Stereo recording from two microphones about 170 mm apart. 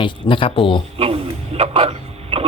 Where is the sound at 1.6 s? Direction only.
35° right (ahead or behind).